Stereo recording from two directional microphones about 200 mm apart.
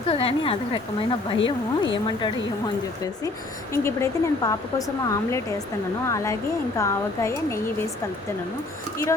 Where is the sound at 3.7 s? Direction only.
15° left (ahead or behind).